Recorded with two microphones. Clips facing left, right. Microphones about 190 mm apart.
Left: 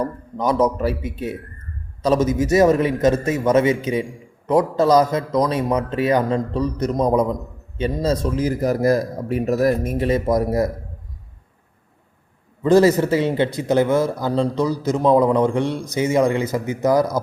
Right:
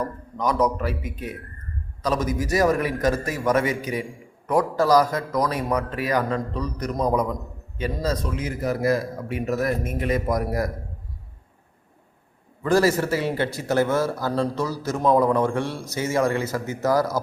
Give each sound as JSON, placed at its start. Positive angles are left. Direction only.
{"t": 0.0, "sound": "speech", "side_deg": 30}
{"t": 12.6, "sound": "speech", "side_deg": 20}